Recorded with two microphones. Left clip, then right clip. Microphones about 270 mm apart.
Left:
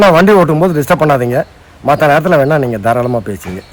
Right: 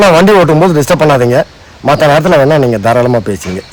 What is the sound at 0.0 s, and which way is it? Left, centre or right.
A man's voice, right.